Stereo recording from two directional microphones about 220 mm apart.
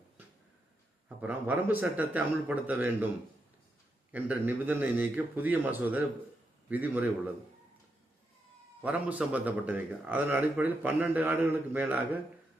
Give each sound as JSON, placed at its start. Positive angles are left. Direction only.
{"t": 1.2, "sound": "a man's voice", "side_deg": -10}
{"t": 4.1, "sound": "a man's voice", "side_deg": -10}
{"t": 8.8, "sound": "a man's voice", "side_deg": -5}